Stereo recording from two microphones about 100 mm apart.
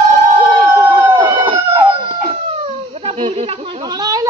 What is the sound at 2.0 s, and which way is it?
Chicken, 85° right.